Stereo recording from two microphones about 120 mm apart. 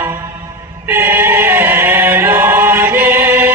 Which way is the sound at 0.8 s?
15° right (ahead or behind).